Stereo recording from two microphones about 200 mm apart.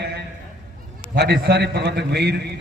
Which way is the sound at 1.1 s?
55° right (ahead or behind).